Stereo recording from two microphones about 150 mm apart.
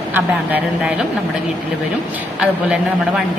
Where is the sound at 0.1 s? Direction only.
10° right (ahead or behind).